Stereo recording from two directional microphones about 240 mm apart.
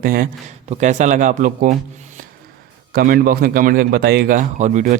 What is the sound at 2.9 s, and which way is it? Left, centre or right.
Speech, right.